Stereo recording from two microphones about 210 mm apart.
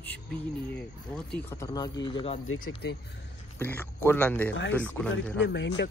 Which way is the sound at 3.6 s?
10° left (ahead or behind).